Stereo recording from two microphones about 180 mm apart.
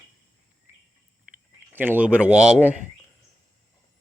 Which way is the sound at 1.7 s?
10° right (ahead or behind).